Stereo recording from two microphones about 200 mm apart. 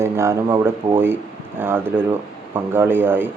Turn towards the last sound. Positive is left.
turn(degrees=-10)  # may be behind; listen again after turning